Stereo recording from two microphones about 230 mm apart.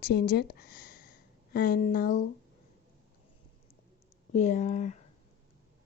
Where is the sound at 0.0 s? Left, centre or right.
Left.